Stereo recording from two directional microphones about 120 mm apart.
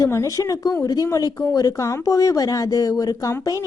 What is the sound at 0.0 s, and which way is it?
Speech, 25° left (ahead or behind).